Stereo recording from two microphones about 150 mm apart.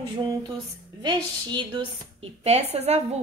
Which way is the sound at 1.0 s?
30° right (ahead or behind).